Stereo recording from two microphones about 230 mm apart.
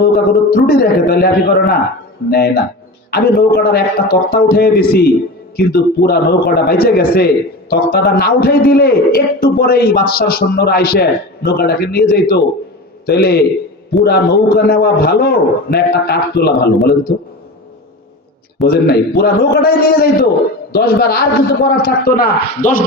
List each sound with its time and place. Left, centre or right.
0.0 s a man's voice: left
18.6 s a man's voice: left